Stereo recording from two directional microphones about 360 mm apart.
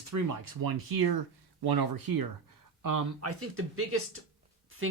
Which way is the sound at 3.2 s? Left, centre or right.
Right.